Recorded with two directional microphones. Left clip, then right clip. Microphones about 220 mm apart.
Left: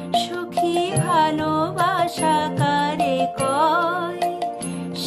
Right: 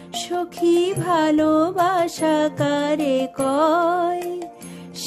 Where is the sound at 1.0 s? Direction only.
55° right (ahead or behind).